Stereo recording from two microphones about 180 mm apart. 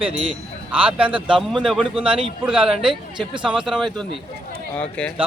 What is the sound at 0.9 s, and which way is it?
Speech, 5° right (ahead or behind).